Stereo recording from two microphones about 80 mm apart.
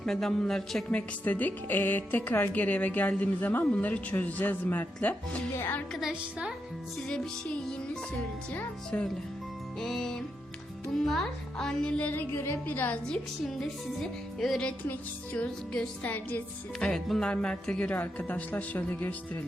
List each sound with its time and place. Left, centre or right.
0.0 s speech: centre
0.9 s speech: centre
7.1 s speech: centre
9.8 s speech: centre; by 12.5 s left
12.6 s speech: left
13.4 s speech: centre
14.8 s speech: left
16.8 s speech: centre